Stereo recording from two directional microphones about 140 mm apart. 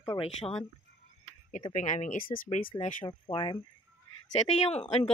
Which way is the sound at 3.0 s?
35° left (ahead or behind).